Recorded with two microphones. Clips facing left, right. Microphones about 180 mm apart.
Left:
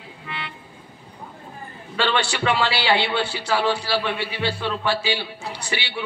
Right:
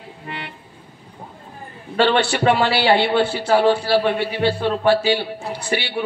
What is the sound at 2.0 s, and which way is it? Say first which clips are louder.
A man's voice: right 6 dB; 55° right (ahead or behind).